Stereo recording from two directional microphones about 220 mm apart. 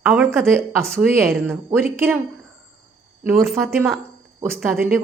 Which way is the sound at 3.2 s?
15° right (ahead or behind).